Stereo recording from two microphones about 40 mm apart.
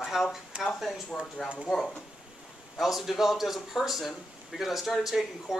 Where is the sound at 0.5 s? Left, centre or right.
Right.